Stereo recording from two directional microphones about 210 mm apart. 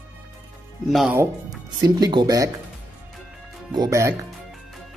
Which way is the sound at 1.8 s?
20° right (ahead or behind).